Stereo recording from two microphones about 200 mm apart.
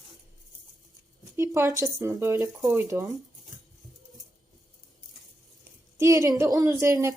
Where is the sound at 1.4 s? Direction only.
15° right (ahead or behind).